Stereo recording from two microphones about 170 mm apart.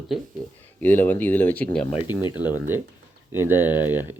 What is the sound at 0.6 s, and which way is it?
Speech, 10° left (ahead or behind).